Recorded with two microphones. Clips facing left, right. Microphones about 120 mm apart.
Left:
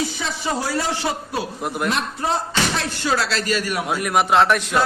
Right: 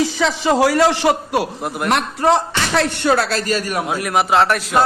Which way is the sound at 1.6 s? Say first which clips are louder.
Right 1 dB; 5° right (ahead or behind).